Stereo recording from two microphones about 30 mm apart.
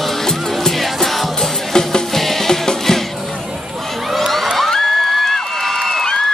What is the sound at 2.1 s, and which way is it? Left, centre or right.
Music, centre.